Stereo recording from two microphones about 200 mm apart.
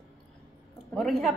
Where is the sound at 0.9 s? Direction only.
Centre (ahead or behind).